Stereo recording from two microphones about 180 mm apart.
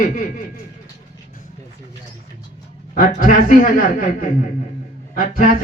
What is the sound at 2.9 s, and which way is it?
A man's voice, 50° left (ahead or behind).